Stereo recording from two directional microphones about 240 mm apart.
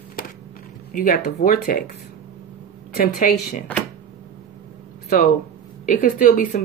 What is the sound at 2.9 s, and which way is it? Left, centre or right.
Speech, left.